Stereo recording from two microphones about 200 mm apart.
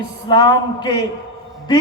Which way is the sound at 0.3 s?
20° left (ahead or behind).